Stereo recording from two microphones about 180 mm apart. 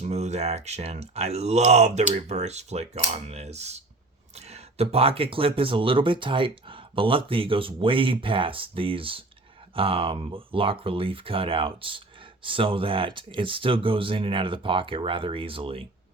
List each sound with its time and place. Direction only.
0.0 s speech: 40° right (ahead or behind)